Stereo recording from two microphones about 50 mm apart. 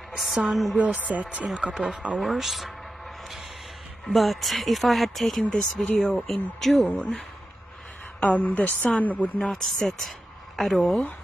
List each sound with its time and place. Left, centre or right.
0.5 s speech: centre
0.7 s speech: right
1.7 s speech: centre
2.2 s speech: centre
4.0 s speech: centre
6.9 s a woman's voice: left
8.2 s a woman's voice: left
9.5 s a woman's voice: centre